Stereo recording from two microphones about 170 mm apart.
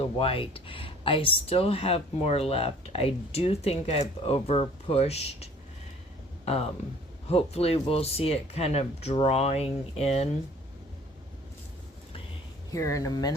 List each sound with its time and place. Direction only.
0.0 s speech: 35° left (ahead or behind)
12.7 s speech: 20° left (ahead or behind)